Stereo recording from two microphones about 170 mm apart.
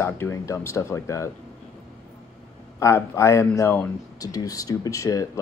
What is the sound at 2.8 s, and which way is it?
Speech, 15° left (ahead or behind).